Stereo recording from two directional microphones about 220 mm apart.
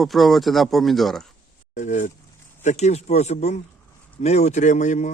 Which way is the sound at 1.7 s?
35° left (ahead or behind).